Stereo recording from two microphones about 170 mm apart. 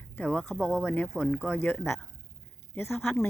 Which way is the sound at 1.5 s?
10° left (ahead or behind).